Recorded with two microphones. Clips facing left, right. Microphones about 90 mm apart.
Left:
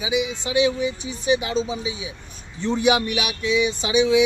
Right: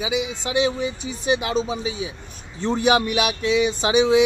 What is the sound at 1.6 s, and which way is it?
Speech, 45° right (ahead or behind).